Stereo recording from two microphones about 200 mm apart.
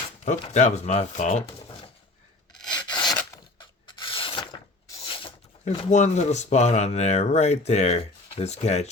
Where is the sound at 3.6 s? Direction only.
25° left (ahead or behind).